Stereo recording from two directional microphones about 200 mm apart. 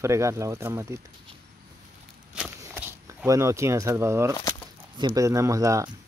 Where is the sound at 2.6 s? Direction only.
15° right (ahead or behind).